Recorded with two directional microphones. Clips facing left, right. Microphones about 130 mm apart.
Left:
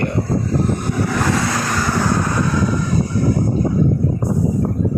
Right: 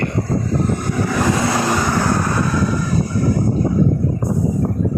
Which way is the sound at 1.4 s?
20° right (ahead or behind).